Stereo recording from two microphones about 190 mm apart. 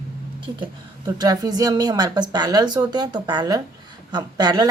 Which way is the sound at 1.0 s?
20° right (ahead or behind).